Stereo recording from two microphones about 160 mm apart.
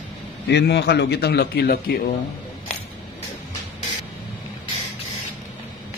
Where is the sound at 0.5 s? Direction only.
90° left.